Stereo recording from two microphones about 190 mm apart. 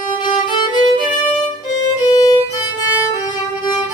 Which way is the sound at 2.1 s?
20° left (ahead or behind).